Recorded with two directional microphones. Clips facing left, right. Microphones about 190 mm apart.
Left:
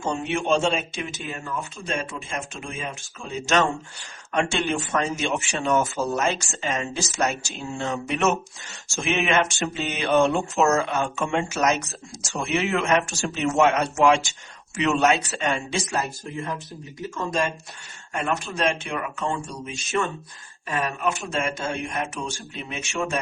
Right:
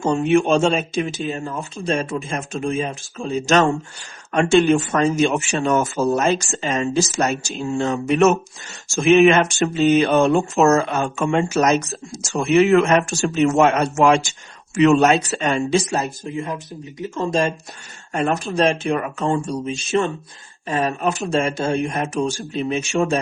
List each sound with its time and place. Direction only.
0.0 s speech: 50° right (ahead or behind)
15.9 s speech: 20° right (ahead or behind)
17.2 s speech: 30° right (ahead or behind)